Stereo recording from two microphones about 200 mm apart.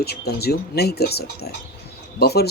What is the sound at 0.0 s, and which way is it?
Speech, 55° left (ahead or behind).